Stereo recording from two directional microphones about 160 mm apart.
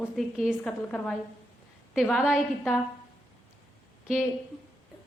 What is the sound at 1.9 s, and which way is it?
Speech, 5° right (ahead or behind).